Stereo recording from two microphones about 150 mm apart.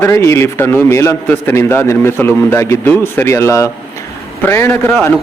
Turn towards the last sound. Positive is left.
turn(degrees=15)  # may be behind; listen again after turning